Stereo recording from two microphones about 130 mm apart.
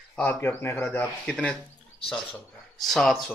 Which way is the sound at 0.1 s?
15° left (ahead or behind).